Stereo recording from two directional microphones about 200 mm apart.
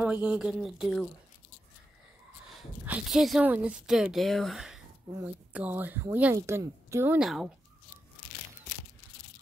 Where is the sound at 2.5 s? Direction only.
5° right (ahead or behind).